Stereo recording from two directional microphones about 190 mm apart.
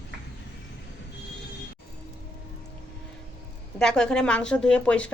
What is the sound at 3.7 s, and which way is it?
A woman's voice, 5° left (ahead or behind).